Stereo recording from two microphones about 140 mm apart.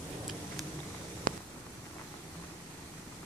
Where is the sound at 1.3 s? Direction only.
70° right (ahead or behind).